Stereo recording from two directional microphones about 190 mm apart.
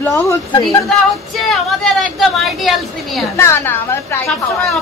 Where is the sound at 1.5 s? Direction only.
Centre (ahead or behind).